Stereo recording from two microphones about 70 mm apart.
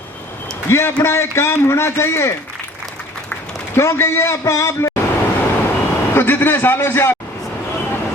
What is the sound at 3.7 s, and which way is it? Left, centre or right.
A man's voice, left.